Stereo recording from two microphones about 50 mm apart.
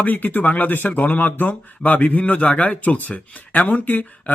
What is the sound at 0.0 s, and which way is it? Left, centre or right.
A man's voice, left.